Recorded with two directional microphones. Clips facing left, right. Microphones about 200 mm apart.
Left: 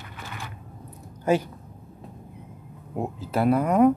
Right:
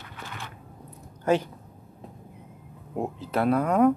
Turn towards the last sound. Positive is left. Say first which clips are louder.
# left 2 dB
turn(degrees=5)  # may be behind; listen again after turning